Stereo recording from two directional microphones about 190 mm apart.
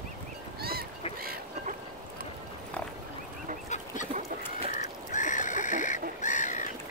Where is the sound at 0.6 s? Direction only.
55° right (ahead or behind).